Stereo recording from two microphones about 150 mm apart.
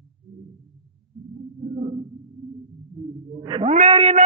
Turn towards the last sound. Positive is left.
turn(degrees=-40)  # may be behind; listen again after turning